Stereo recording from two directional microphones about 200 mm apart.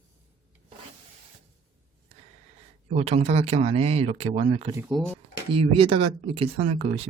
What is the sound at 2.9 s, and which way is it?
Speech, 30° right (ahead or behind).